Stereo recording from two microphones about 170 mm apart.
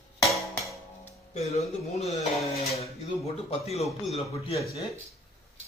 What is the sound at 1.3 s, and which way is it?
Speech, 40° left (ahead or behind).